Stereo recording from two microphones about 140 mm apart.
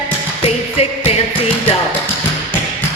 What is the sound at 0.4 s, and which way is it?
Music, 45° left (ahead or behind).